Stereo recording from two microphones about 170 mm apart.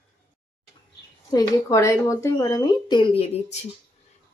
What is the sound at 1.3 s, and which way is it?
Speech, 20° left (ahead or behind).